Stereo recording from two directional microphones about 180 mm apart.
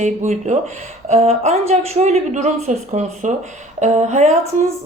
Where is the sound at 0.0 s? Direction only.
40° right (ahead or behind).